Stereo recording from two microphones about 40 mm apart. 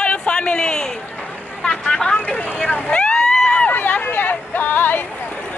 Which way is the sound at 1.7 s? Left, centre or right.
Centre.